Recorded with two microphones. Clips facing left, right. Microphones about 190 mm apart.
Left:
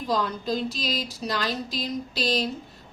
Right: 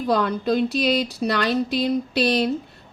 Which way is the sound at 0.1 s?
60° right (ahead or behind).